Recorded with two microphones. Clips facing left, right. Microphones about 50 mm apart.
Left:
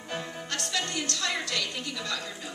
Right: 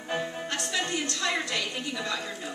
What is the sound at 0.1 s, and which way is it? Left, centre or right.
A woman's voice, centre.